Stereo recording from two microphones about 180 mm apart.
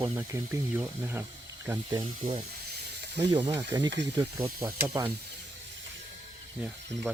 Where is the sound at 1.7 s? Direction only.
15° right (ahead or behind).